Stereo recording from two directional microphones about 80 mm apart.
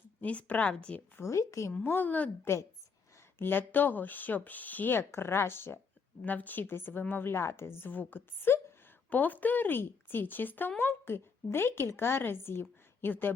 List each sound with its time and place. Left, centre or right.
0.2 s speech: centre
1.1 s speech: left
1.8 s a woman's voice: left